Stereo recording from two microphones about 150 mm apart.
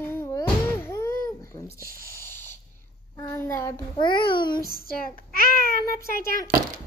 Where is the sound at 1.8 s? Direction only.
75° right (ahead or behind).